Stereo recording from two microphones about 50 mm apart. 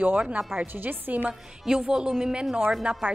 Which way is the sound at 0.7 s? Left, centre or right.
Right.